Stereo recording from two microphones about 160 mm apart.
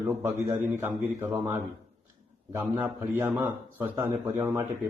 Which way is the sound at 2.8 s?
10° right (ahead or behind).